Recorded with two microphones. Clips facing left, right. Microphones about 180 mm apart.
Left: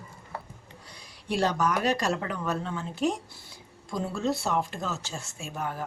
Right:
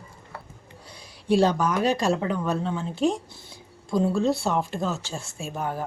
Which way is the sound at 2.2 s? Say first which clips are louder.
Right 5 dB; 25° right (ahead or behind).